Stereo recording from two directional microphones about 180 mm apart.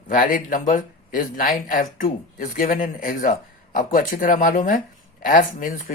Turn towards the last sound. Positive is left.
turn(degrees=45)  # may be behind; listen again after turning